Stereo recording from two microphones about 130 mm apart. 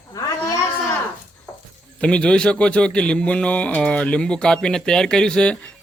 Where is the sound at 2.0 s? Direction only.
10° left (ahead or behind).